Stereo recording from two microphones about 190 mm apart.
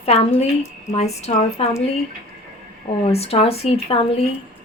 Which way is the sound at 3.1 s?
30° left (ahead or behind).